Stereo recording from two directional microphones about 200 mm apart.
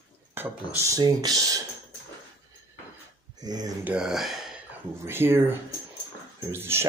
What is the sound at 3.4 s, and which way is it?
Speech, 20° right (ahead or behind).